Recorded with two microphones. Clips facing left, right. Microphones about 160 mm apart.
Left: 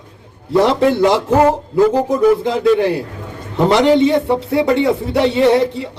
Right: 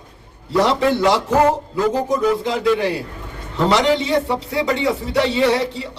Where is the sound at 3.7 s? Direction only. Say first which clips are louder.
Left 6 dB; 55° left (ahead or behind).